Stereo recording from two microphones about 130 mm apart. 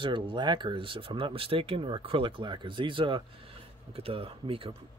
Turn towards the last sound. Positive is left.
turn(degrees=-45)  # may be behind; listen again after turning